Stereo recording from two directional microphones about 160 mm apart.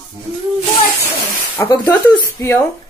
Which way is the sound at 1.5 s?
25° left (ahead or behind).